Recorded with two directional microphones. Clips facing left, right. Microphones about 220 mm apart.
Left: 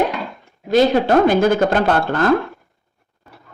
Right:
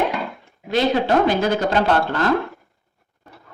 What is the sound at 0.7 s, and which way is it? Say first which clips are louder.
Speech: left 4 dB; 45° left (ahead or behind).